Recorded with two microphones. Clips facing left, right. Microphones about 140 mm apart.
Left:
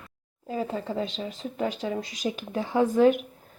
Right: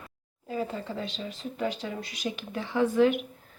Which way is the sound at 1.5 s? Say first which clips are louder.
Left 3 dB; 35° left (ahead or behind).